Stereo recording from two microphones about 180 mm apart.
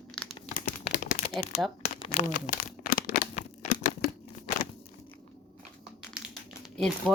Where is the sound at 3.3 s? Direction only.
45° left (ahead or behind).